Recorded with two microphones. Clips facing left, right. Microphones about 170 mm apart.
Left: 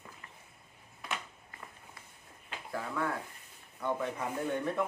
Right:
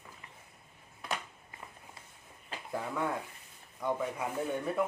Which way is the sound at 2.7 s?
15° right (ahead or behind).